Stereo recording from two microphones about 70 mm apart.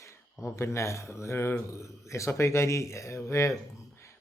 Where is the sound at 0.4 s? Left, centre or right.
Left.